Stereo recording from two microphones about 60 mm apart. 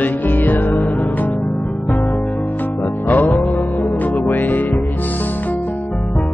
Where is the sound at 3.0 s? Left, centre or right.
Left.